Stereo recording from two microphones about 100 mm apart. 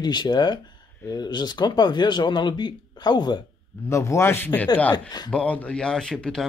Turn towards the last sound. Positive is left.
turn(degrees=5)  # may be behind; listen again after turning